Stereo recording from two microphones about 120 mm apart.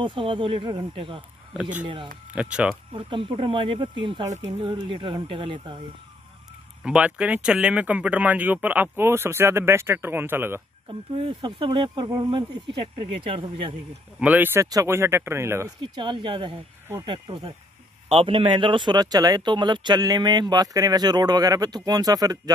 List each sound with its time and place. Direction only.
0.0 s speech: 45° right (ahead or behind)
2.3 s speech: 10° right (ahead or behind)
2.9 s speech: 45° right (ahead or behind)
4.2 s speech: 70° right (ahead or behind)
4.6 s speech: 45° right (ahead or behind)
6.8 s speech: 10° right (ahead or behind)
10.9 s speech: 50° right (ahead or behind)
14.2 s speech: 15° right (ahead or behind)
14.6 s speech: 25° right (ahead or behind)
15.9 s speech: 40° right (ahead or behind)